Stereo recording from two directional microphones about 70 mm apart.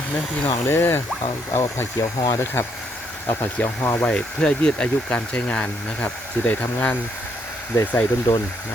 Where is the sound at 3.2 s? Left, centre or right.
Left.